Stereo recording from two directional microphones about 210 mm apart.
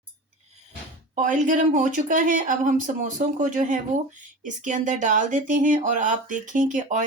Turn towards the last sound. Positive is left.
turn(degrees=-35)  # may be behind; listen again after turning